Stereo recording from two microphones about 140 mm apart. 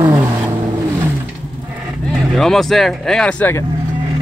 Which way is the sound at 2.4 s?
5° left (ahead or behind).